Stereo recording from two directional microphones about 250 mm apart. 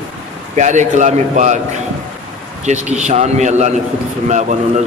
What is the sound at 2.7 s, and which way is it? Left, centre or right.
A man's voice, right.